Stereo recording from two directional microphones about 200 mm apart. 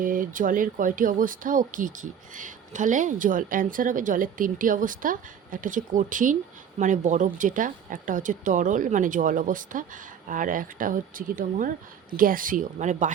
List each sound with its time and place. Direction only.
0.0 s speech: 45° right (ahead or behind)